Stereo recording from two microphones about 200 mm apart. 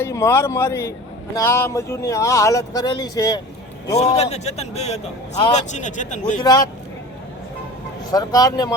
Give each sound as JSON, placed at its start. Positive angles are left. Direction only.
{"t": 0.0, "sound": "speech", "side_deg": 15}
{"t": 3.9, "sound": "a man's voice", "side_deg": 30}
{"t": 6.4, "sound": "speech", "side_deg": 20}
{"t": 8.1, "sound": "speech", "side_deg": 20}